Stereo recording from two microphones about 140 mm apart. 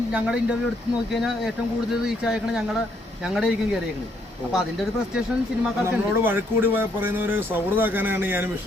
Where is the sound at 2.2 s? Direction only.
5° right (ahead or behind).